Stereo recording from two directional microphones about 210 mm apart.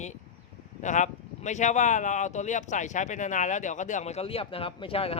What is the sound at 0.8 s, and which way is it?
Speech, 35° left (ahead or behind).